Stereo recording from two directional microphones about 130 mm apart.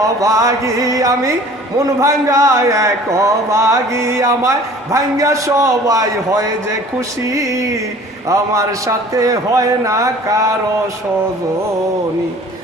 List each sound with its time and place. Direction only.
0.2 s speech: 25° right (ahead or behind)